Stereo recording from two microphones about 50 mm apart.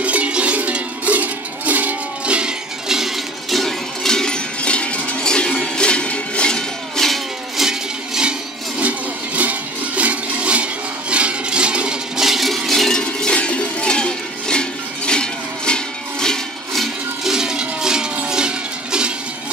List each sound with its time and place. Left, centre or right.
0.0 s music: right
2.9 s music: centre
4.6 s music: left
7.0 s music: centre
7.5 s music: centre
12.2 s cowbell: centre
13.0 s music: left; by 17.3 s centre
17.3 s music: centre